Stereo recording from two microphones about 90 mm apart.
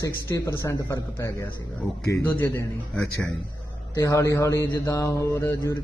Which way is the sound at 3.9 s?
35° left (ahead or behind).